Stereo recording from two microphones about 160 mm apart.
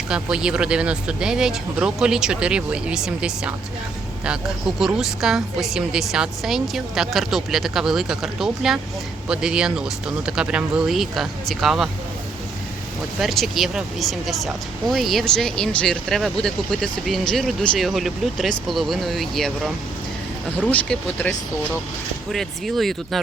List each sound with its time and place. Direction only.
0.1 s speech: 5° right (ahead or behind)
13.1 s speech: centre (ahead or behind)